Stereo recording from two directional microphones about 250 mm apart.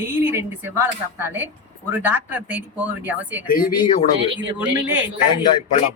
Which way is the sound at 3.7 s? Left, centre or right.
Centre.